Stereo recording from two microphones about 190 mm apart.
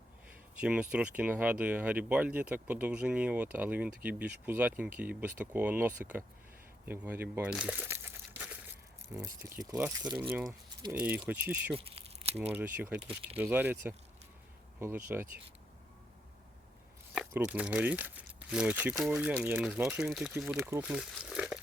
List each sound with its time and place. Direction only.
0.6 s speech: 5° right (ahead or behind)
6.8 s crumpling: 10° right (ahead or behind)
9.1 s speech: 10° right (ahead or behind)
11.7 s a sound: 30° right (ahead or behind)
12.5 s speech: 10° right (ahead or behind)
13.0 s speech: 30° right (ahead or behind)
13.4 s speech: 10° right (ahead or behind)
17.2 s speech: 5° right (ahead or behind)